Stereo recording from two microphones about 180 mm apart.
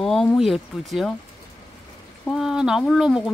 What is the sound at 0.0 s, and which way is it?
Speech, centre (ahead or behind).